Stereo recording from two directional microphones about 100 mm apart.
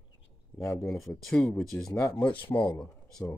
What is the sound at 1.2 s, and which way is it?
Speech, 5° left (ahead or behind).